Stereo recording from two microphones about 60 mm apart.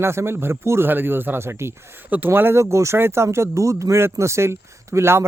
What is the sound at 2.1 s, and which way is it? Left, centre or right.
Speech, right.